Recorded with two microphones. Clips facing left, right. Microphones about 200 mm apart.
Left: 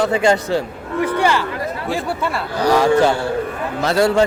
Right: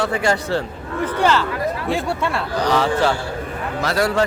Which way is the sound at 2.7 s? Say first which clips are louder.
Left 5 dB; 10° left (ahead or behind).